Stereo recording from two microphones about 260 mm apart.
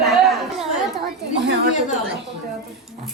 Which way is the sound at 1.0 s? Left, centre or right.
Right.